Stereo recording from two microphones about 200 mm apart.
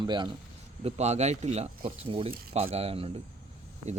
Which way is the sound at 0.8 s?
35° right (ahead or behind).